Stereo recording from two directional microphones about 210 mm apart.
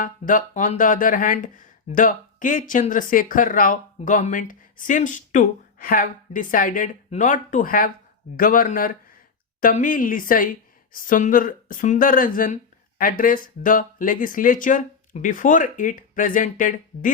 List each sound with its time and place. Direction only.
0.0 s speech: 40° left (ahead or behind)